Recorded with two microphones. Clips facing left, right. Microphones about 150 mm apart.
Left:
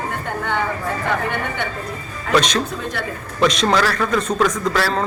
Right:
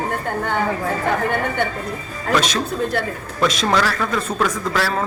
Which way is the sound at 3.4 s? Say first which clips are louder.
Left 2 dB; centre (ahead or behind).